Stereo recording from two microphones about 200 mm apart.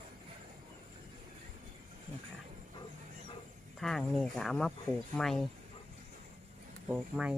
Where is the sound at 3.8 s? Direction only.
Centre (ahead or behind).